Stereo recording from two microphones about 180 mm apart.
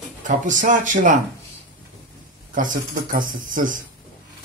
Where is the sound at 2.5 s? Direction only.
50° right (ahead or behind).